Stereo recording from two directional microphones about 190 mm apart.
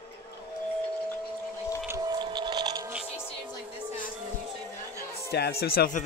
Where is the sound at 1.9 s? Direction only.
20° right (ahead or behind).